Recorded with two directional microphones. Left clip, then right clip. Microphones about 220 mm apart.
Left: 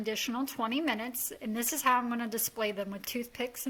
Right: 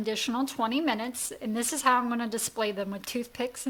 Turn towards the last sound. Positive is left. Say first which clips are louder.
# right 4 dB
turn(degrees=-5)  # may be behind; listen again after turning